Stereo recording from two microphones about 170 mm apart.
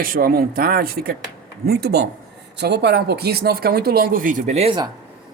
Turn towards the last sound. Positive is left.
turn(degrees=-40)  # may be behind; listen again after turning